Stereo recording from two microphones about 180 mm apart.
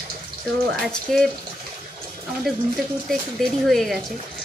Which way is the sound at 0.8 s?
5° left (ahead or behind).